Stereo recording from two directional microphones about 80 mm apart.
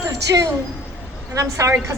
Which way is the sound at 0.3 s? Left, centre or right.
Right.